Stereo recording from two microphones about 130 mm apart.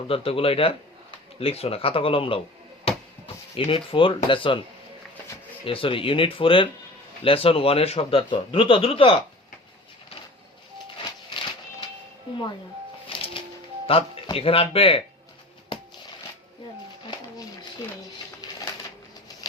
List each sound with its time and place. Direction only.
0.1 s speech: 45° left (ahead or behind)
3.5 s speech: 45° left (ahead or behind)
5.6 s speech: 45° left (ahead or behind)
10.9 s a sound: 40° left (ahead or behind)
13.1 s music: 40° left (ahead or behind)
13.9 s speech: 45° left (ahead or behind)
18.4 s a sound: 30° left (ahead or behind)